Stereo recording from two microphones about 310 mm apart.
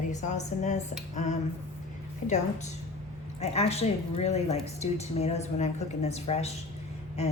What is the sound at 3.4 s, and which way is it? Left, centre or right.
A woman's voice, centre.